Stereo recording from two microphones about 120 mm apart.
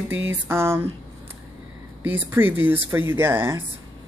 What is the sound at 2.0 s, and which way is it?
Speech, 15° right (ahead or behind).